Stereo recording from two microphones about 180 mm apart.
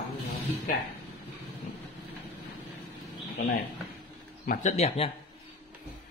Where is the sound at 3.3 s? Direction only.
60° left (ahead or behind).